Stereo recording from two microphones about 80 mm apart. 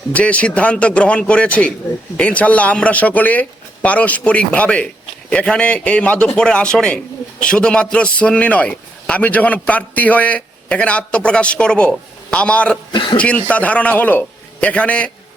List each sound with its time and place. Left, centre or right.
0.1 s a man's voice: centre
12.9 s speech: left
13.1 s a man's voice: centre